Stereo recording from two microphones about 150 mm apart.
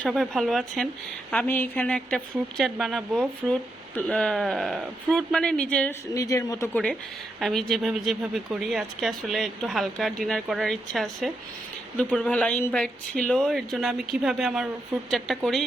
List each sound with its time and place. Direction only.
0.0 s speech: centre (ahead or behind)
1.3 s speech: 10° left (ahead or behind)
6.1 s speech: 20° left (ahead or behind)
7.3 s speech: centre (ahead or behind)